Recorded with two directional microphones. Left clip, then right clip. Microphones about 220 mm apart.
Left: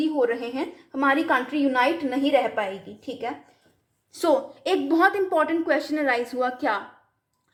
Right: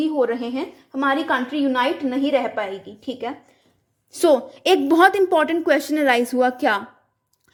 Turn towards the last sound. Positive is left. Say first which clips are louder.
# right 6 dB
turn(degrees=-45)  # may be behind; listen again after turning